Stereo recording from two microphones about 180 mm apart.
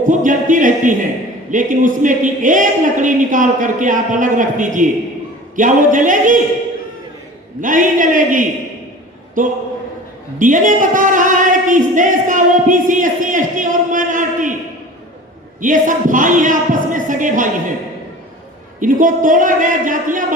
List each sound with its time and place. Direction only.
0.0 s a woman's voice: 45° right (ahead or behind)
7.6 s a woman's voice: 45° right (ahead or behind)
10.3 s a sound: 45° right (ahead or behind)
15.6 s a woman's voice: 45° right (ahead or behind)
18.8 s a woman's voice: 45° right (ahead or behind)